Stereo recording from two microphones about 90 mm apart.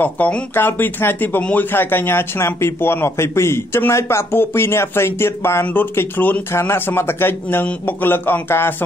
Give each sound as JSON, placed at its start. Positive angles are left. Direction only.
{"t": 0.0, "sound": "a man's voice", "side_deg": 20}